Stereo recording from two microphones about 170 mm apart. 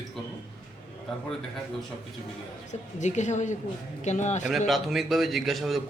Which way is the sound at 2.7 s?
45° left (ahead or behind).